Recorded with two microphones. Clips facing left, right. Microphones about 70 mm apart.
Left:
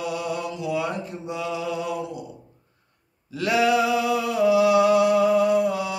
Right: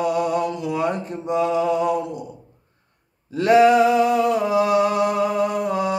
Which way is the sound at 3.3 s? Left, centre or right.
Right.